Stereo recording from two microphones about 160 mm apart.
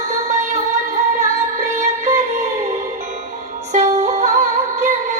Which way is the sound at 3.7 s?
45° right (ahead or behind).